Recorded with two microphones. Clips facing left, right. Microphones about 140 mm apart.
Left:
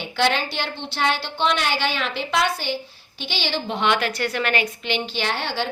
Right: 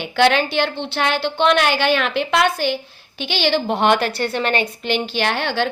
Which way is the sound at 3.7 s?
45° right (ahead or behind).